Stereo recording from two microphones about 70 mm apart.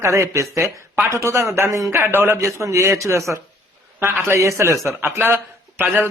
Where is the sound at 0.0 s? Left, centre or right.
Right.